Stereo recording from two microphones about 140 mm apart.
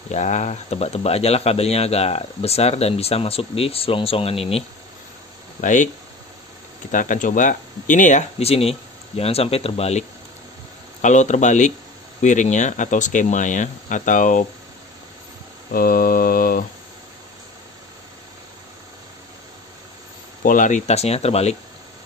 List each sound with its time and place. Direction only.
0.1 s speech: 55° left (ahead or behind)
5.6 s speech: 65° left (ahead or behind)
6.9 s speech: 70° left (ahead or behind); by 10.0 s 50° left (ahead or behind)
11.0 s speech: 60° left (ahead or behind)
15.7 s mantra: 90° left
20.4 s speech: 65° left (ahead or behind); by 21.5 s 50° left (ahead or behind)